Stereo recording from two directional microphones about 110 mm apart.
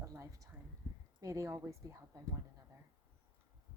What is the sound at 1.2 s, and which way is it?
Speech, 30° right (ahead or behind).